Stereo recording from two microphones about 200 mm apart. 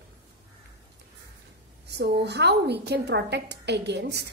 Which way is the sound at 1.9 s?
55° right (ahead or behind).